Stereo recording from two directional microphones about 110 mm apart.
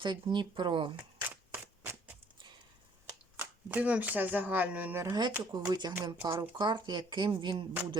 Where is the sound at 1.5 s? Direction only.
20° right (ahead or behind).